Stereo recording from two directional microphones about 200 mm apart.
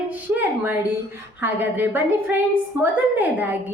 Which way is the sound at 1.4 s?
10° right (ahead or behind).